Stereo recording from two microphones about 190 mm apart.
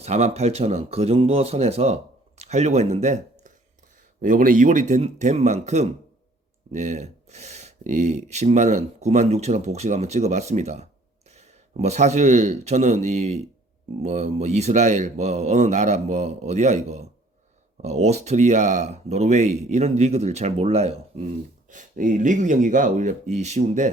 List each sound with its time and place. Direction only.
0.0 s a man's voice: 35° right (ahead or behind)